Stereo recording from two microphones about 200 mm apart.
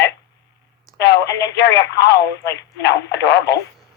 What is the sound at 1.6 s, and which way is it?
Speech, 60° left (ahead or behind).